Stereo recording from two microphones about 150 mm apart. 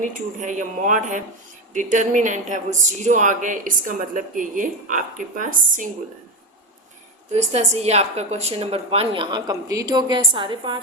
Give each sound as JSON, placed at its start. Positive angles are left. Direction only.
{"t": 0.0, "sound": "speech", "side_deg": -60}
{"t": 7.3, "sound": "a woman's voice", "side_deg": -45}
{"t": 9.3, "sound": "a woman's voice", "side_deg": -25}